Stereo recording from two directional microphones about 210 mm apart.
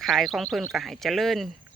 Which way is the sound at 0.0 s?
Centre (ahead or behind).